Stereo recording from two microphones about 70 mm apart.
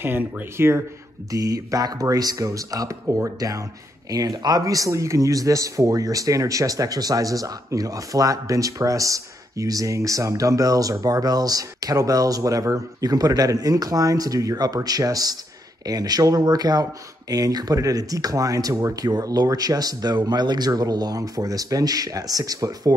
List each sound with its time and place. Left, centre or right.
0.0 s speech: right
1.3 s speech: right
4.1 s speech: right